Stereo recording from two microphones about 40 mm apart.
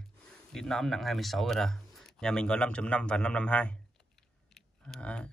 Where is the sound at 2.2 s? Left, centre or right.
Centre.